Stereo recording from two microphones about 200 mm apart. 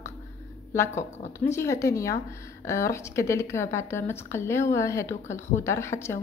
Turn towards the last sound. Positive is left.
turn(degrees=15)  # may be behind; listen again after turning